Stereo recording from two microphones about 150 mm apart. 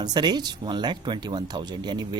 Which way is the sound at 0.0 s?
30° right (ahead or behind).